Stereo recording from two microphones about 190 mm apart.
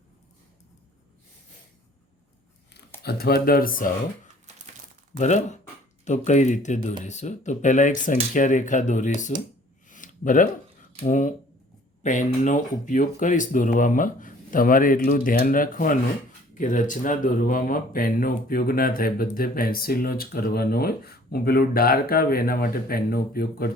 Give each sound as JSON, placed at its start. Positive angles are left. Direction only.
{"t": 3.0, "sound": "speech", "side_deg": 55}
{"t": 5.1, "sound": "speech", "side_deg": 40}
{"t": 9.9, "sound": "a sound", "side_deg": 45}
{"t": 11.0, "sound": "speech", "side_deg": 40}